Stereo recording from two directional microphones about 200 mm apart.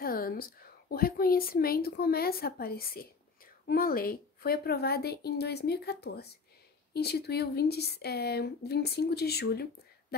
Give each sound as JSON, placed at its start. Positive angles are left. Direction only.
{"t": 0.0, "sound": "a woman's voice", "side_deg": 45}